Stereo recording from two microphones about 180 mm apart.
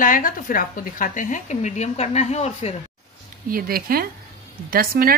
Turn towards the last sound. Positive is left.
turn(degrees=-55)  # may be behind; listen again after turning